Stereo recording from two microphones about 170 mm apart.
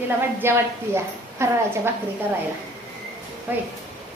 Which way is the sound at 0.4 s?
15° right (ahead or behind).